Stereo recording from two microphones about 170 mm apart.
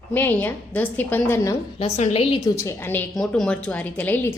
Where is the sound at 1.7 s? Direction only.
40° left (ahead or behind).